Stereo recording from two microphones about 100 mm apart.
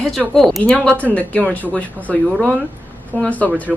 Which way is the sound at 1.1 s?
15° left (ahead or behind).